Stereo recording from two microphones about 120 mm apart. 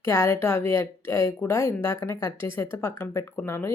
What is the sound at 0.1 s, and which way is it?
Speech, 25° left (ahead or behind).